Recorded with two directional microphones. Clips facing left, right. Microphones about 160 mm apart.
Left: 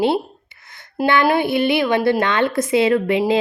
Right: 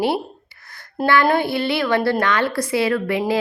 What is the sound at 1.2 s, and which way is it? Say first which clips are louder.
A woman's voice: left 2 dB; 15° left (ahead or behind).